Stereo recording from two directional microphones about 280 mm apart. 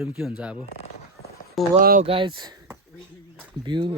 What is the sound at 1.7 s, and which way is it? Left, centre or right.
Speech, right.